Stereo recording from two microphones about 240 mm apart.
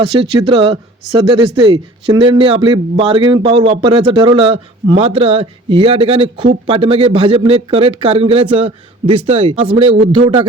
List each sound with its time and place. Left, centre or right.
0.0 s a man's voice: right